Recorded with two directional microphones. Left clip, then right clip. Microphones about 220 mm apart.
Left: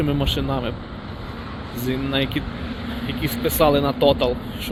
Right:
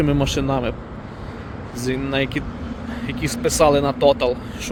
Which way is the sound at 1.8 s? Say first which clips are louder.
Right 1 dB; 15° right (ahead or behind).